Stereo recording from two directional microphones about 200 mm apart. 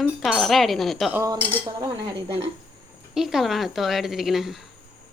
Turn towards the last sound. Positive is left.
turn(degrees=0)  # may be behind; listen again after turning